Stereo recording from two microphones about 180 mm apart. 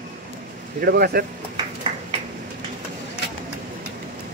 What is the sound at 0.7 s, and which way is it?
Speech, 60° right (ahead or behind).